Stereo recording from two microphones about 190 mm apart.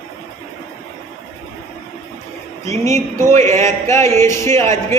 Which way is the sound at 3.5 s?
40° right (ahead or behind).